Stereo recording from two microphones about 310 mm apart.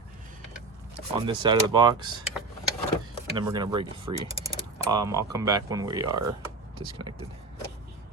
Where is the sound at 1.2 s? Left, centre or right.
Centre.